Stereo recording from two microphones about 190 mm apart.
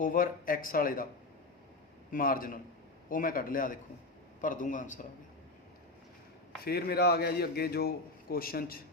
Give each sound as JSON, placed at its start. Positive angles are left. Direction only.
{"t": 0.0, "sound": "speech", "side_deg": 45}
{"t": 2.1, "sound": "speech", "side_deg": 50}
{"t": 6.7, "sound": "a man's voice", "side_deg": 55}